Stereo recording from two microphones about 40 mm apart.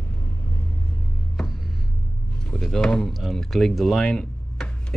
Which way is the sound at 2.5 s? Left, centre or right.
Centre.